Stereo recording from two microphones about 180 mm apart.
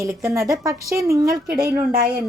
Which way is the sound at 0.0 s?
15° right (ahead or behind).